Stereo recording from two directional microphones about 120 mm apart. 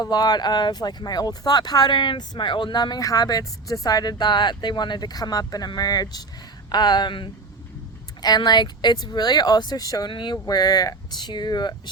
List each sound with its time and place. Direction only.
0.0 s speech: 35° left (ahead or behind)